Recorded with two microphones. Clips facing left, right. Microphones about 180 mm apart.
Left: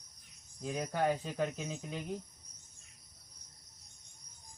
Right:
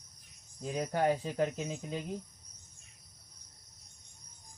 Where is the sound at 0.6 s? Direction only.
30° right (ahead or behind).